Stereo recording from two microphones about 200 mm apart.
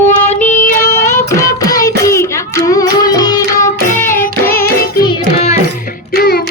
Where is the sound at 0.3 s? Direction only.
35° left (ahead or behind).